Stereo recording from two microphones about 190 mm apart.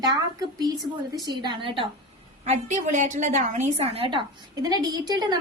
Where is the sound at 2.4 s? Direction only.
35° right (ahead or behind).